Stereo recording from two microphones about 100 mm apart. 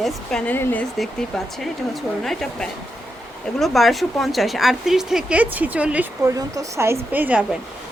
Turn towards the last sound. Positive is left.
turn(degrees=-15)  # may be behind; listen again after turning